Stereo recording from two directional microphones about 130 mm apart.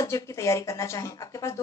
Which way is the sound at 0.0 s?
25° left (ahead or behind).